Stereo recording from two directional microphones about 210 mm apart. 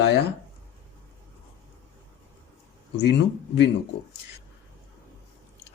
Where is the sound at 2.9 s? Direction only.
55° left (ahead or behind).